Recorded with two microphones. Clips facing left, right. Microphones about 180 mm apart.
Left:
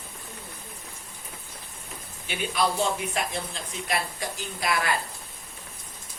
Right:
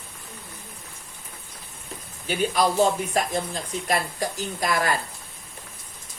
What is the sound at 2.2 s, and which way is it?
Speech, 40° right (ahead or behind).